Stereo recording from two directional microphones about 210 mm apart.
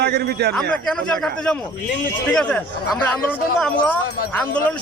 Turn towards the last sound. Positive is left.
turn(degrees=5)  # may be behind; listen again after turning